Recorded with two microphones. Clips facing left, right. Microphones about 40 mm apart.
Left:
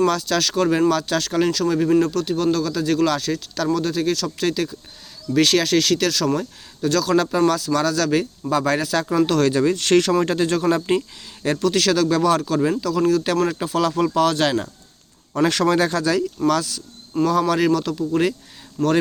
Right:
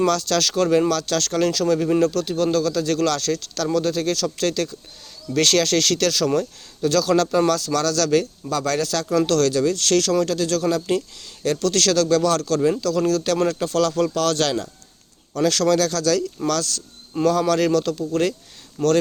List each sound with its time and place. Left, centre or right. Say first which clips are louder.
0.0 s speech: even; centre; by 11.0 s left
11.6 s speech: left 1 dB; centre
16.5 s speech: left 2 dB; centre
18.8 s speech: right 1 dB; centre